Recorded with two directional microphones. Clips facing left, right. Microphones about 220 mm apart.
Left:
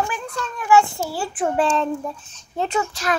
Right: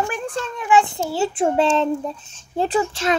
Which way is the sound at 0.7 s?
20° right (ahead or behind).